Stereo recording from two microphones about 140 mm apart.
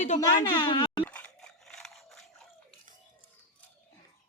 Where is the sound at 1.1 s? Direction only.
10° left (ahead or behind).